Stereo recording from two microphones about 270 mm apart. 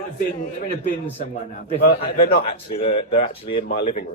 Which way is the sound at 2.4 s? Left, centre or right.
Left.